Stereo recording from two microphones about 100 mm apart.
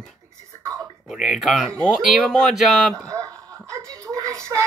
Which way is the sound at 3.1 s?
35° right (ahead or behind).